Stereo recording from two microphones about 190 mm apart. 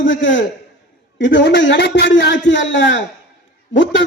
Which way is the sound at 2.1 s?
75° left (ahead or behind).